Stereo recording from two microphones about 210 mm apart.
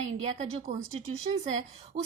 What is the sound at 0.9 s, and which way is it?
Speech, 30° right (ahead or behind).